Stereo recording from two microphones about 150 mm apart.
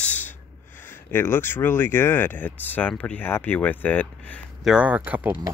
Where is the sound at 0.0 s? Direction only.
10° left (ahead or behind).